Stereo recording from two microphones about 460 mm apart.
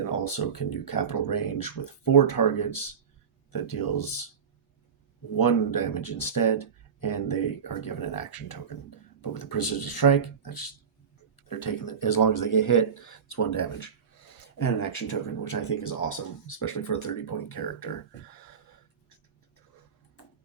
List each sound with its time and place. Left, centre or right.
0.1 s speech: left
5.4 s speech: left